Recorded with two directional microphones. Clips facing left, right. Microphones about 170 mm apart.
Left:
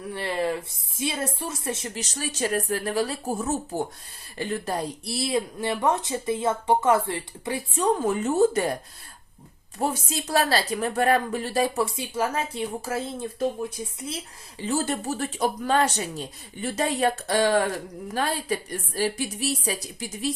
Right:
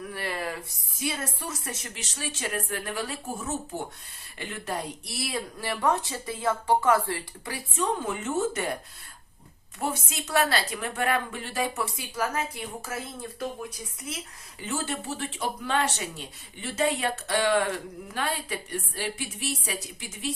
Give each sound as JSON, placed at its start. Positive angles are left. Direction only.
{"t": 0.1, "sound": "speech", "side_deg": 25}
{"t": 2.0, "sound": "speech", "side_deg": 40}
{"t": 7.8, "sound": "speech", "side_deg": 40}